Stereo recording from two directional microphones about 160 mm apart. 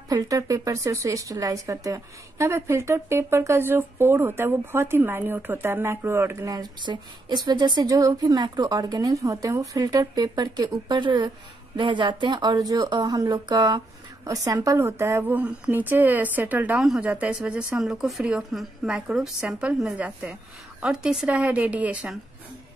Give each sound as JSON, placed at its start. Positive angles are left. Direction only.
{"t": 0.1, "sound": "speech", "side_deg": -20}